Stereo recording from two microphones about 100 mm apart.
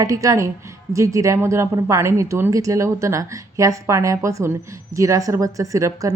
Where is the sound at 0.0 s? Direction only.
35° right (ahead or behind).